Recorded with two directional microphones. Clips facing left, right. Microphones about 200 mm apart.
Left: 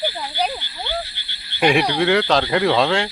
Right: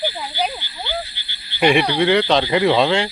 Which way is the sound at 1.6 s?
Centre (ahead or behind).